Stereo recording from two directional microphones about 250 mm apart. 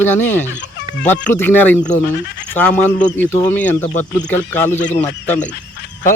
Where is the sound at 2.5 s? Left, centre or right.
Centre.